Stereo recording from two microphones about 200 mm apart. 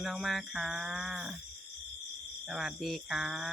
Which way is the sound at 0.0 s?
Centre (ahead or behind).